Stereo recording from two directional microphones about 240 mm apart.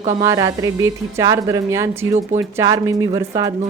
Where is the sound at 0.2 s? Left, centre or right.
Centre.